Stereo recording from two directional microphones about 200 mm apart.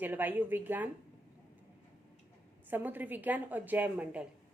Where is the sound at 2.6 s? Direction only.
10° right (ahead or behind).